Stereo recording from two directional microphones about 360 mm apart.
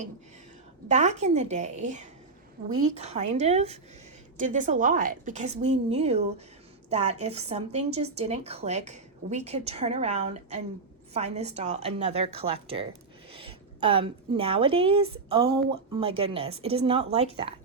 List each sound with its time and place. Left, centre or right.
0.9 s a woman's voice: centre